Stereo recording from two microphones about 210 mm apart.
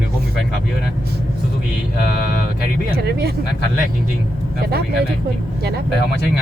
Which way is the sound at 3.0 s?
50° right (ahead or behind).